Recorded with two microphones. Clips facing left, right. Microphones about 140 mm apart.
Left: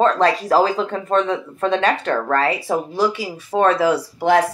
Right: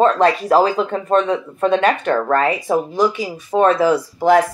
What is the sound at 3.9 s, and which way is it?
Speech, 70° left (ahead or behind).